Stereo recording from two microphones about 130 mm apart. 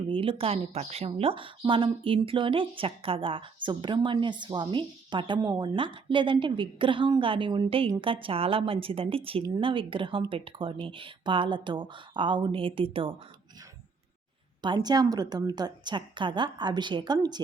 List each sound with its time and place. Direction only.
0.1 s a woman's voice: 45° right (ahead or behind)
14.6 s a woman's voice: 35° right (ahead or behind)